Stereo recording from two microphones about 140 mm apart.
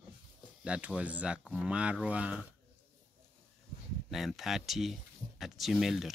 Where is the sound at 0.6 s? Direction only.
5° right (ahead or behind).